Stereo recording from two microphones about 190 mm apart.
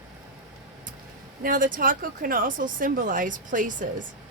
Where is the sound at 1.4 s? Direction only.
45° right (ahead or behind).